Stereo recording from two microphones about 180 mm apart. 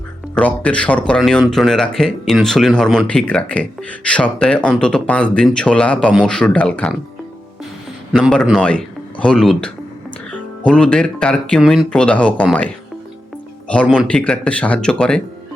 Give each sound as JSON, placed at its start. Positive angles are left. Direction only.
{"t": 0.3, "sound": "speech", "side_deg": 5}
{"t": 8.1, "sound": "speech", "side_deg": 5}
{"t": 13.8, "sound": "speech", "side_deg": 0}